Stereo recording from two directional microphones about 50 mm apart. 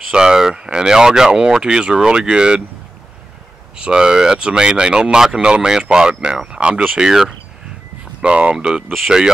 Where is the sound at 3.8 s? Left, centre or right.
Centre.